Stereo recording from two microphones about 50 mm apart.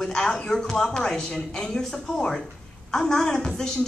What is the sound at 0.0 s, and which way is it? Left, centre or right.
A woman's voice, centre.